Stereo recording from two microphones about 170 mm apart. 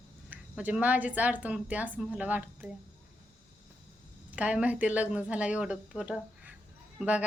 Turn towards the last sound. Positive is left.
turn(degrees=-5)  # may be behind; listen again after turning